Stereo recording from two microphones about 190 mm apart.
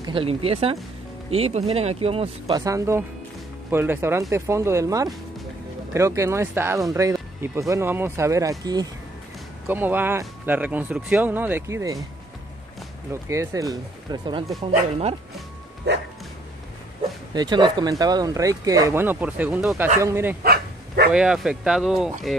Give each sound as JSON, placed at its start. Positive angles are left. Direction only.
{"t": 0.0, "sound": "speech", "side_deg": -30}
{"t": 2.6, "sound": "speech", "side_deg": -15}
{"t": 13.1, "sound": "speech", "side_deg": -15}
{"t": 17.3, "sound": "speech", "side_deg": -20}
{"t": 20.4, "sound": "dog", "side_deg": -55}
{"t": 21.1, "sound": "speech", "side_deg": -5}